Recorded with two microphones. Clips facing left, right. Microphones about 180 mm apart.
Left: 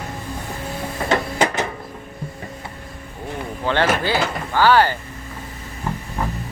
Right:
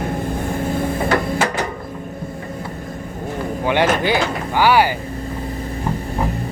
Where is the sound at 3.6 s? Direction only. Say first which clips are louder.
Right 2 dB; 15° right (ahead or behind).